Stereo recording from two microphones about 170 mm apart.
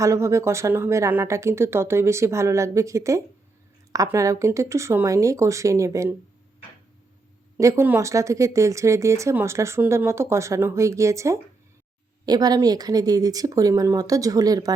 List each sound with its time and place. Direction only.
0.0 s speech: 15° right (ahead or behind)
7.5 s speech: 15° right (ahead or behind)